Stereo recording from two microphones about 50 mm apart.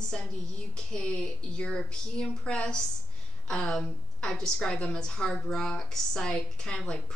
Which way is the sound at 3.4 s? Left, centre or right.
Centre.